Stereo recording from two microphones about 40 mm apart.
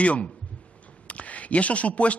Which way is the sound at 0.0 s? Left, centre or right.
Left.